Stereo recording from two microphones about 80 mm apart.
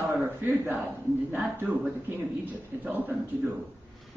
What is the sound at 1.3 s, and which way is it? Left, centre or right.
Speech, right.